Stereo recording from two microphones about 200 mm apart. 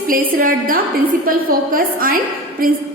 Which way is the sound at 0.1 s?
45° right (ahead or behind).